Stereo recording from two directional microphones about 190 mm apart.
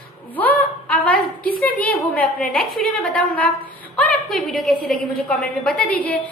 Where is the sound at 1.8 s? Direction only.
10° left (ahead or behind).